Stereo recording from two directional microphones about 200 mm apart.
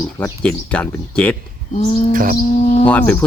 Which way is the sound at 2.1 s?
45° right (ahead or behind).